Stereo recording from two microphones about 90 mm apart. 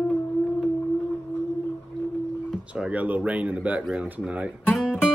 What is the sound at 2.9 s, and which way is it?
Speech, 15° right (ahead or behind).